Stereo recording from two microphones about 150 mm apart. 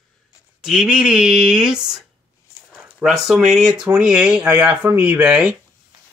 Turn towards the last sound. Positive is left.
turn(degrees=-10)  # may be behind; listen again after turning